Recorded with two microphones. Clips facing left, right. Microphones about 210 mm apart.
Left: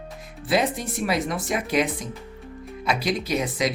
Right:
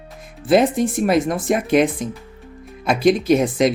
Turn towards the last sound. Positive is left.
turn(degrees=-50)  # may be behind; listen again after turning